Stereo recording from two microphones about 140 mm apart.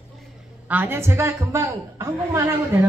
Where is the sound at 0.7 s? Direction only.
15° right (ahead or behind).